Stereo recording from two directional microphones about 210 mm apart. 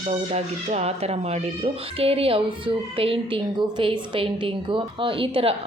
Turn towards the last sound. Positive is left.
turn(degrees=-25)  # may be behind; listen again after turning